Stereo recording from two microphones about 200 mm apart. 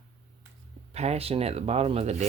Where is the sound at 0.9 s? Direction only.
30° right (ahead or behind).